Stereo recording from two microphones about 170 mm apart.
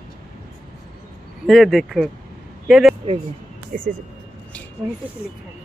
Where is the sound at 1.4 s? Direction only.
Centre (ahead or behind).